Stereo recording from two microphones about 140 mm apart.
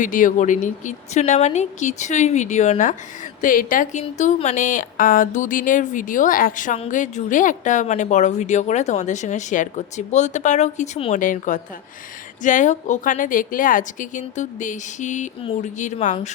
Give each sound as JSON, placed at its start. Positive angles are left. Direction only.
{"t": 0.0, "sound": "a woman's voice", "side_deg": 70}
{"t": 3.4, "sound": "a woman's voice", "side_deg": 75}